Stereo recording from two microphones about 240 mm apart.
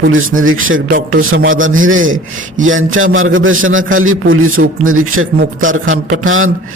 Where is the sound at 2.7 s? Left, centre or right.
Right.